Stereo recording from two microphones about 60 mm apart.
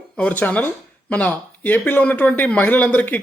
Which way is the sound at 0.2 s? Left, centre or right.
Left.